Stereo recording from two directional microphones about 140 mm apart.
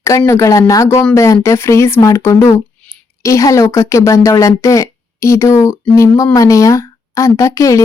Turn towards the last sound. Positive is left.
turn(degrees=25)  # may be behind; listen again after turning